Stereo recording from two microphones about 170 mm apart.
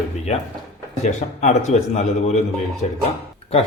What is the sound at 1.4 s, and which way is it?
Speech, 40° left (ahead or behind).